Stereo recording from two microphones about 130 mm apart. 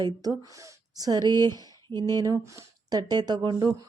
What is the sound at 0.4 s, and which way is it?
Speech, 25° right (ahead or behind).